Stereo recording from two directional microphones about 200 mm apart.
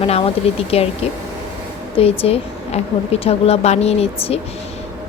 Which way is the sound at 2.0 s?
30° left (ahead or behind).